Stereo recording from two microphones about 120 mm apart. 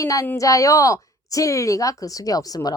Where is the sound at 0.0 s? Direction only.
25° left (ahead or behind).